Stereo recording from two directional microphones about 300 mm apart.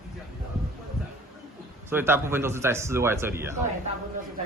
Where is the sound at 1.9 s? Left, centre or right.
Centre.